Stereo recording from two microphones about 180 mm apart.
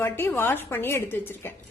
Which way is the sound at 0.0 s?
15° left (ahead or behind).